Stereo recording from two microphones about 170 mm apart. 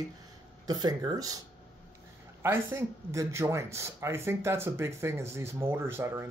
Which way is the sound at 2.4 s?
15° right (ahead or behind).